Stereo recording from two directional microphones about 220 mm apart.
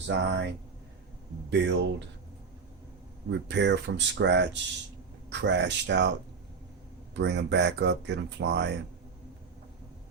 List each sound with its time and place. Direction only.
0.1 s speech: 50° right (ahead or behind)
3.5 s speech: 55° right (ahead or behind)
7.2 s speech: 50° right (ahead or behind)